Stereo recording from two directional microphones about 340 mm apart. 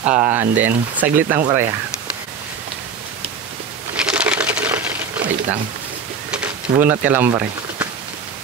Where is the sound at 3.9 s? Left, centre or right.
Centre.